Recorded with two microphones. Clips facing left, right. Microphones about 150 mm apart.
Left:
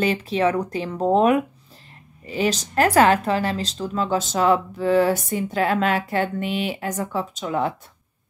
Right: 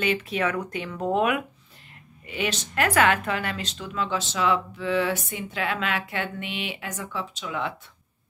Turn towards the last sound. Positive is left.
turn(degrees=40)  # may be behind; listen again after turning